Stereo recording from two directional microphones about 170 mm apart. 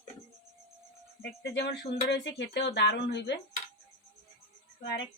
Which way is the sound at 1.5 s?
90° left.